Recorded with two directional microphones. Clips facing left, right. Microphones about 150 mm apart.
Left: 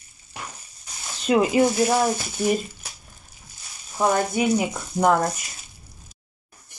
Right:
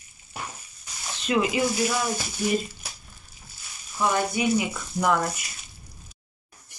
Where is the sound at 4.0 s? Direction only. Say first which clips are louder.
Left 3 dB; 45° left (ahead or behind).